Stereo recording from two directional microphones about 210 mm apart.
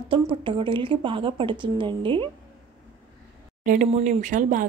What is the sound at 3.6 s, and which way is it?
Speech, 40° right (ahead or behind).